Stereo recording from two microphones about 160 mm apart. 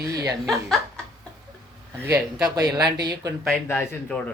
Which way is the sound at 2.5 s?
25° right (ahead or behind).